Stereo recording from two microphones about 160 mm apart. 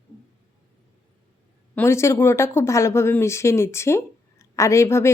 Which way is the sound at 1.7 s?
15° left (ahead or behind).